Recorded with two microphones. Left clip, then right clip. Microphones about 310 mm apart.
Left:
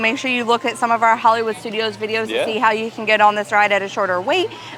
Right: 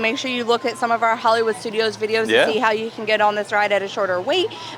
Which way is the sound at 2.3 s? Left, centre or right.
Right.